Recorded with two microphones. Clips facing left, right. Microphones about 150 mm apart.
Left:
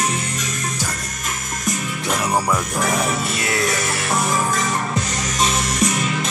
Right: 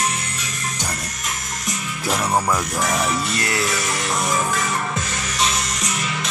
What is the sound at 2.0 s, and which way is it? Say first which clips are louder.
Music: right 1 dB; centre (ahead or behind).